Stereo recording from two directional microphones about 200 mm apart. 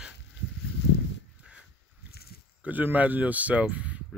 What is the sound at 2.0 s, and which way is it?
Pig, 50° left (ahead or behind).